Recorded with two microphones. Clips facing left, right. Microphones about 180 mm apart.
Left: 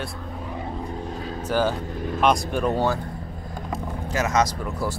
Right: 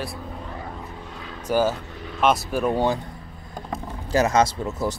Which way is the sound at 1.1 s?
40° left (ahead or behind).